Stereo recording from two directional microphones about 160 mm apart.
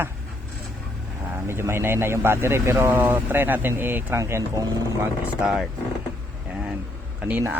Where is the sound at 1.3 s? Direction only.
15° right (ahead or behind).